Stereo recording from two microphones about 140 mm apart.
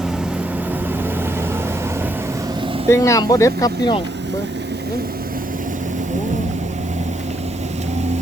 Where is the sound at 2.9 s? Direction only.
20° left (ahead or behind).